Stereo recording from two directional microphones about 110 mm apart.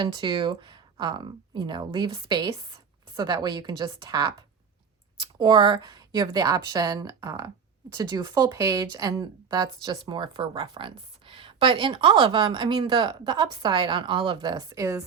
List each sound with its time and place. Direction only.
0.0 s a woman's voice: 45° right (ahead or behind)
14.8 s speech: 30° right (ahead or behind)